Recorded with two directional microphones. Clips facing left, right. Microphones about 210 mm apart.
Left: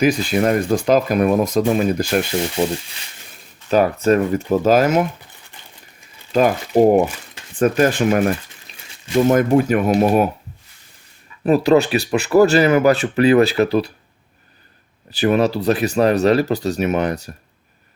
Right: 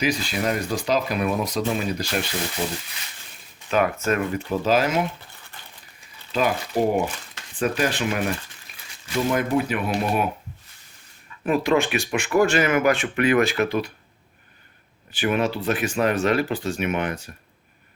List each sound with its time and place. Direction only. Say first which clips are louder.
0.0 s speech: left 8 dB; 50° left (ahead or behind)
3.7 s speech: left 7 dB; 35° left (ahead or behind)
6.3 s speech: left 8 dB; 50° left (ahead or behind)
9.3 s speech: left 7 dB; 45° left (ahead or behind)
11.4 s speech: left 7 dB; 35° left (ahead or behind)
15.1 s speech: left 6 dB; 40° left (ahead or behind)